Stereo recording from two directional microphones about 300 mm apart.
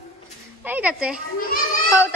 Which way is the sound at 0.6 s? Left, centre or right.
Centre.